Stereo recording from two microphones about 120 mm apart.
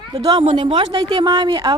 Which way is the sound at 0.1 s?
35° right (ahead or behind).